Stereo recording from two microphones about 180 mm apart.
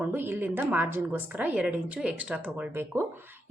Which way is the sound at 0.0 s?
10° right (ahead or behind).